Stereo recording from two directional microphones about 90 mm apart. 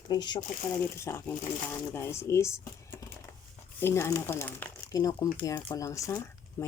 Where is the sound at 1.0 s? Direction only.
30° left (ahead or behind).